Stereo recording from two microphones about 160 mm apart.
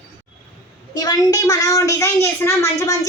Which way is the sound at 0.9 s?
25° left (ahead or behind).